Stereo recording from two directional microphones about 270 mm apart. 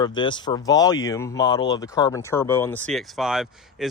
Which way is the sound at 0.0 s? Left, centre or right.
Centre.